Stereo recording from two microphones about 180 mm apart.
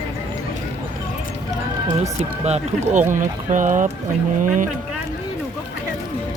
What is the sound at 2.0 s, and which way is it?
Speech, 40° right (ahead or behind).